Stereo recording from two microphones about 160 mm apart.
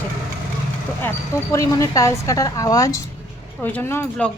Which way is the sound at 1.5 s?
20° left (ahead or behind).